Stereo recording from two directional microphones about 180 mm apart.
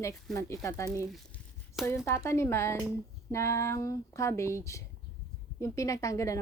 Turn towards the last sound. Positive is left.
turn(degrees=15)  # may be behind; listen again after turning